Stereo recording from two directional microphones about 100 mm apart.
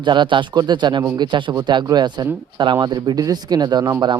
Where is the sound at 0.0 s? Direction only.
50° right (ahead or behind).